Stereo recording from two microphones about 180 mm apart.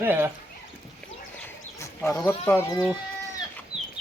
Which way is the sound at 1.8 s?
15° left (ahead or behind).